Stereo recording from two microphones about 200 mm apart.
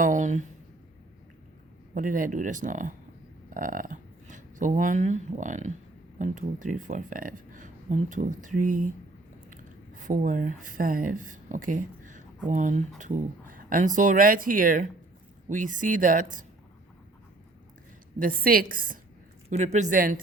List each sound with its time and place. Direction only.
0.0 s speech: 40° right (ahead or behind)
2.0 s speech: 40° right (ahead or behind)
18.2 s speech: 45° right (ahead or behind)